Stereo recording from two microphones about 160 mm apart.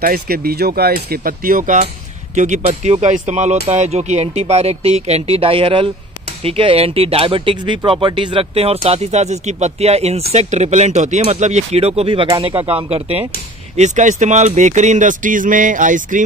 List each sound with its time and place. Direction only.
0.0 s speech: 70° right (ahead or behind); by 13.3 s 35° right (ahead or behind)
13.7 s speech: 50° right (ahead or behind)